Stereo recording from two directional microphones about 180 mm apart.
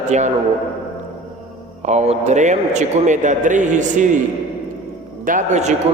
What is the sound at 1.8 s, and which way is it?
A man's voice, 35° right (ahead or behind).